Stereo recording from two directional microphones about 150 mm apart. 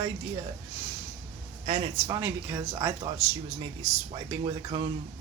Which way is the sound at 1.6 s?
40° right (ahead or behind).